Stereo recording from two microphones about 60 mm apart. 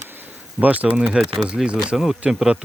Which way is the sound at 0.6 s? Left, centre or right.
Right.